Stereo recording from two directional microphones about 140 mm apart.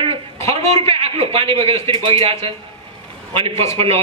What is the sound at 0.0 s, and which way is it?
A man's voice, 50° right (ahead or behind).